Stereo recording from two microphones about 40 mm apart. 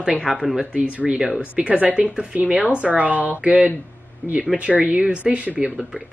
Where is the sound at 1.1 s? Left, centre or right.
Centre.